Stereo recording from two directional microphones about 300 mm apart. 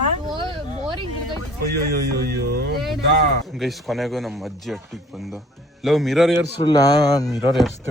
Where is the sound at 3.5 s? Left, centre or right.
Centre.